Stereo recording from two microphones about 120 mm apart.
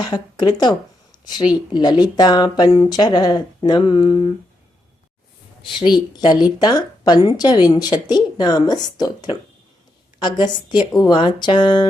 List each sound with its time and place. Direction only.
0.0 s speech: 35° left (ahead or behind)
5.8 s speech: 40° left (ahead or behind)